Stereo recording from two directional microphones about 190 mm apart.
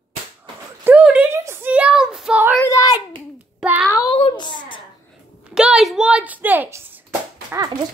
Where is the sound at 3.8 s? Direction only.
20° left (ahead or behind).